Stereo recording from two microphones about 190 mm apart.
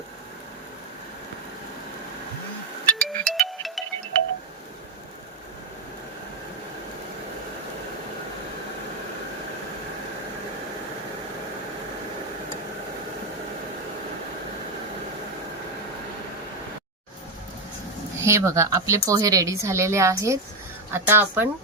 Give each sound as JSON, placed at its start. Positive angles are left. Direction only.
{"t": 2.8, "sound": "music", "side_deg": 5}
{"t": 18.2, "sound": "a woman's voice", "side_deg": -15}